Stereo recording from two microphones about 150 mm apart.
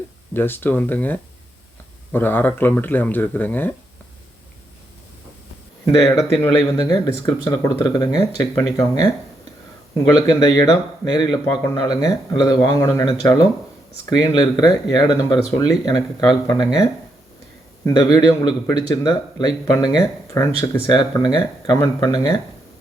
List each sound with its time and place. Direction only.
0.3 s speech: 15° left (ahead or behind)
5.8 s a man's voice: 25° left (ahead or behind)
10.2 s a man's voice: 25° left (ahead or behind)
17.8 s a man's voice: 25° left (ahead or behind)